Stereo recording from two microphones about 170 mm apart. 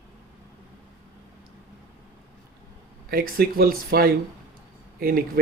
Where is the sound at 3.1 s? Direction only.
60° right (ahead or behind).